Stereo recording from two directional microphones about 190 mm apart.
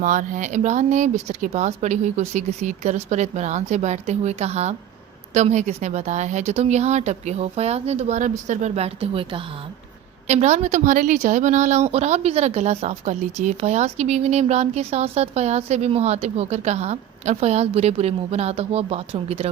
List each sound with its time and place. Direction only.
0.0 s a woman's voice: 40° right (ahead or behind)